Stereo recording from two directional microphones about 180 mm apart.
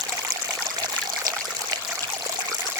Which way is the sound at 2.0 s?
20° right (ahead or behind).